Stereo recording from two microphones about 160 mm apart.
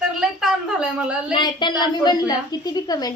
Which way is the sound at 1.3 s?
30° left (ahead or behind).